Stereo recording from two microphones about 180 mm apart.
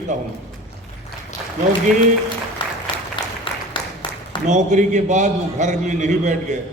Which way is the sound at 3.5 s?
25° left (ahead or behind).